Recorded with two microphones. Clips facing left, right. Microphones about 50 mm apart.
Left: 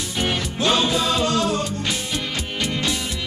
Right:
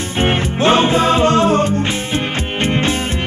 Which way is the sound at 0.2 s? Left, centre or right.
Right.